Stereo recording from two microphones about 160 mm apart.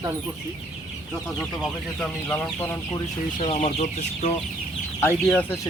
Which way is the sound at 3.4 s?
40° left (ahead or behind).